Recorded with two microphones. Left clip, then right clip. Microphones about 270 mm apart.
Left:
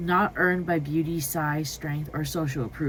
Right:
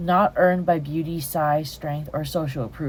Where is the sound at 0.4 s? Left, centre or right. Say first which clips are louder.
Right 5 dB; right.